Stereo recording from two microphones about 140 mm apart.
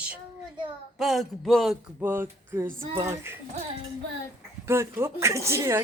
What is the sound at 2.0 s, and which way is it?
Speech, 15° right (ahead or behind).